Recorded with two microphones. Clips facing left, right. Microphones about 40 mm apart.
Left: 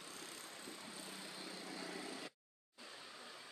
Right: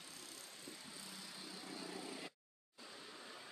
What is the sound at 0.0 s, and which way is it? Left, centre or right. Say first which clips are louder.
Vehicle: left 3 dB; left.